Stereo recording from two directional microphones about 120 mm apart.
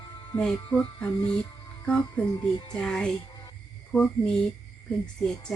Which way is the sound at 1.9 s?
10° left (ahead or behind).